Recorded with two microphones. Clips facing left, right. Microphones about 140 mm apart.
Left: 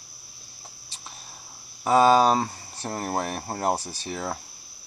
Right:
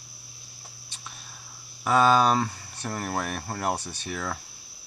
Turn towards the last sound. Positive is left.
turn(degrees=25)  # may be behind; listen again after turning